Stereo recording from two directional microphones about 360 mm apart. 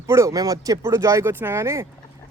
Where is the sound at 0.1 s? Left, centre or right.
Centre.